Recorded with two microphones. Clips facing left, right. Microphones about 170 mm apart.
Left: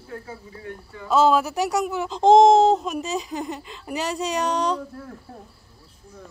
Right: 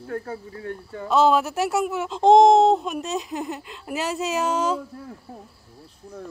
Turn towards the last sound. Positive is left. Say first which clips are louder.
# even
turn(degrees=-10)  # may be behind; listen again after turning